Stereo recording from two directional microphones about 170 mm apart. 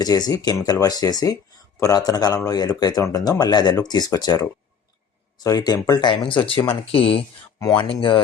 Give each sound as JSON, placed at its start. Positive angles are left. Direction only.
{"t": 0.0, "sound": "speech", "side_deg": 20}